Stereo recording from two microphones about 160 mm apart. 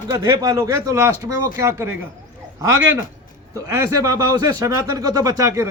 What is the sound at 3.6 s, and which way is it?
A man's voice, 20° right (ahead or behind).